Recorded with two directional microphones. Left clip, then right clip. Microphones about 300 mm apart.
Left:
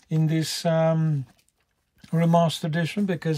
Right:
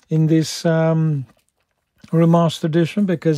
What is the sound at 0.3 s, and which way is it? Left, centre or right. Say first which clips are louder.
Speech: right 6 dB; right.